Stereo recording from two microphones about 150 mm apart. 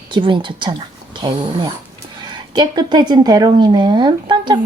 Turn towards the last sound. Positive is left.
turn(degrees=-30)  # may be behind; listen again after turning